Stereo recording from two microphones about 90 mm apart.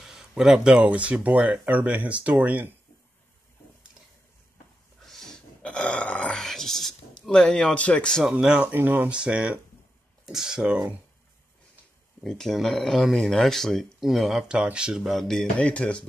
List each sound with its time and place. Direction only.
0.0 s speech: 5° right (ahead or behind)
5.0 s dog: 5° left (ahead or behind)
8.3 s speech: 10° right (ahead or behind)
8.7 s speech: 20° right (ahead or behind)
12.2 s speech: 5° left (ahead or behind)
15.5 s speech: 15° left (ahead or behind)